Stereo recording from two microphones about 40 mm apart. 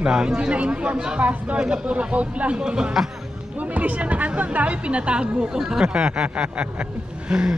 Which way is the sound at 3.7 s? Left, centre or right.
Right.